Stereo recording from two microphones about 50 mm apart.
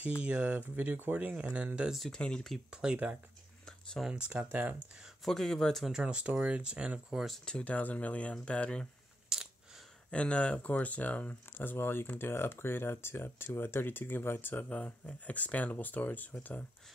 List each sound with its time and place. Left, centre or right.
0.0 s speech: right
2.1 s speech: centre
2.7 s speech: centre
4.1 s speech: right
5.2 s speech: centre
5.9 s speech: centre
7.6 s speech: left
9.3 s a sound: centre
10.1 s speech: left
14.5 s speech: left